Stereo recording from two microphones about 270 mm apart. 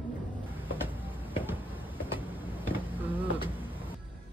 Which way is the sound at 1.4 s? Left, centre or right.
Centre.